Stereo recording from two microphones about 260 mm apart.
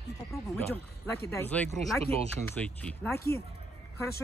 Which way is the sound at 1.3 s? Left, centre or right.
Centre.